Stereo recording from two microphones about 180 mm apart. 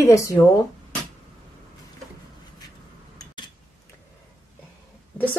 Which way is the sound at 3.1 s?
25° left (ahead or behind).